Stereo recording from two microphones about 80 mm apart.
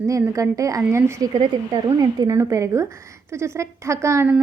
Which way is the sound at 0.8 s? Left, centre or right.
Right.